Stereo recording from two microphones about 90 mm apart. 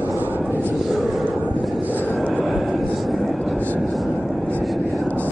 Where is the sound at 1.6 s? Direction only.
Centre (ahead or behind).